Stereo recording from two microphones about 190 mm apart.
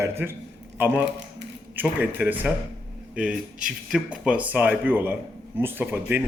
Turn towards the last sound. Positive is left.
turn(degrees=-10)  # may be behind; listen again after turning